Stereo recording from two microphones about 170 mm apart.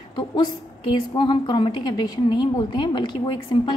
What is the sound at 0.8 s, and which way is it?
A woman's voice, 25° left (ahead or behind).